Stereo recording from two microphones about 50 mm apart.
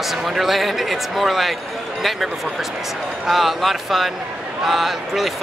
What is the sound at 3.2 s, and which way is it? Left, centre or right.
Speech, centre.